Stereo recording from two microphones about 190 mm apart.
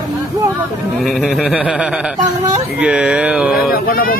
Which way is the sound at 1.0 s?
Centre (ahead or behind).